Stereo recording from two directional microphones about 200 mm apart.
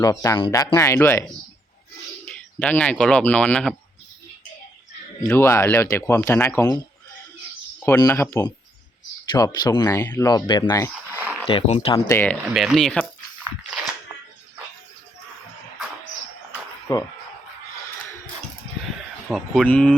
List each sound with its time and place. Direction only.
0.0 s speech: 15° left (ahead or behind)
5.2 s speech: 15° left (ahead or behind)
7.9 s speech: 15° left (ahead or behind)
11.2 s a sound: 10° right (ahead or behind)
11.4 s speech: 30° left (ahead or behind)
11.9 s speech: 15° left (ahead or behind)
12.5 s speech: centre (ahead or behind)
16.9 s speech: 20° left (ahead or behind)
19.3 s speech: 5° left (ahead or behind)